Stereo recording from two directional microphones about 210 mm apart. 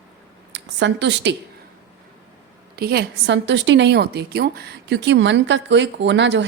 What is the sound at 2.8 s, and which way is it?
A woman's voice, 50° right (ahead or behind).